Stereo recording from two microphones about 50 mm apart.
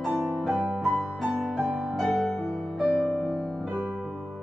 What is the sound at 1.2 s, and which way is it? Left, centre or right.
Music, centre.